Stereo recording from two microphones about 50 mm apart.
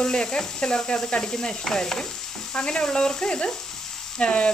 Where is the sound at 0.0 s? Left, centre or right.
Centre.